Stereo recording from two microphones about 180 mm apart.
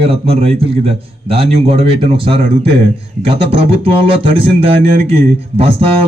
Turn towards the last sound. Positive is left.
turn(degrees=-35)  # may be behind; listen again after turning